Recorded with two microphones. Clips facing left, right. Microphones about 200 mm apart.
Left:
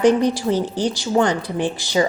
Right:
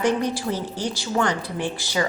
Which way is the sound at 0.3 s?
20° left (ahead or behind).